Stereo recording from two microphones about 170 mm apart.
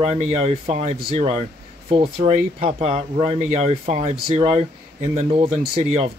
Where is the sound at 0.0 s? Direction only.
40° right (ahead or behind).